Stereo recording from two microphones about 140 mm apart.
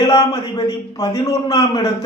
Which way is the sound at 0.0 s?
30° left (ahead or behind).